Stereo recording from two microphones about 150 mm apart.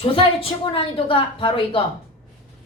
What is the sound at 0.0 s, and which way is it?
A woman's voice, 35° left (ahead or behind).